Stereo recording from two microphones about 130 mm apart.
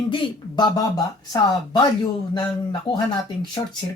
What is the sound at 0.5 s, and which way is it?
Speech, 35° left (ahead or behind).